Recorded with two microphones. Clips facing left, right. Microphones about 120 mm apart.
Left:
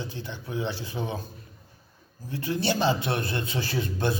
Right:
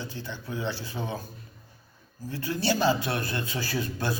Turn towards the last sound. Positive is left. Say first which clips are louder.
# left 2 dB
turn(degrees=20)  # may be behind; listen again after turning